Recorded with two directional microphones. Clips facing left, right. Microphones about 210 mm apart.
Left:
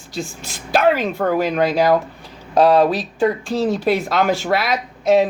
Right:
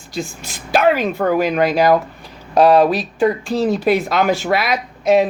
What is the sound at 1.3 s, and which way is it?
Speech, 15° right (ahead or behind).